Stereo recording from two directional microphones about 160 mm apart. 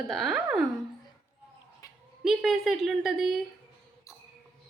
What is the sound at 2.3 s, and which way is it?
A woman's voice, centre (ahead or behind).